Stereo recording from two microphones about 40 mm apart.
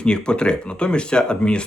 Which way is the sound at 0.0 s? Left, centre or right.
Left.